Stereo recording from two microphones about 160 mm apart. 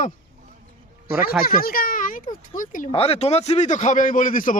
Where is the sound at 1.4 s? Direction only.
65° left (ahead or behind).